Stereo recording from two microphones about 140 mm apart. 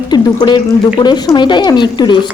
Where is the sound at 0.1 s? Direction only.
30° left (ahead or behind).